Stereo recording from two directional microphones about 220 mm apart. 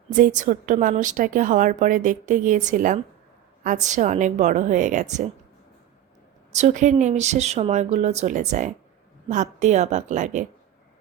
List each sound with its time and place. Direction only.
0.2 s a woman's voice: 35° right (ahead or behind)
6.5 s a woman's voice: 30° right (ahead or behind)